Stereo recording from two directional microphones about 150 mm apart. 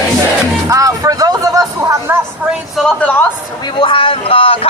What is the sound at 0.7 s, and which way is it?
Music, 20° right (ahead or behind).